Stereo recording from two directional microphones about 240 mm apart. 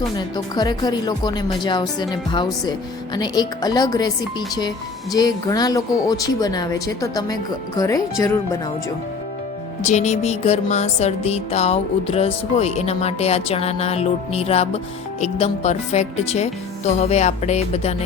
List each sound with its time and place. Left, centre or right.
0.2 s speech: centre
9.8 s music: left